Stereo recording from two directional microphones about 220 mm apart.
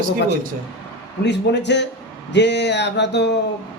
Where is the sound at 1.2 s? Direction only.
50° left (ahead or behind).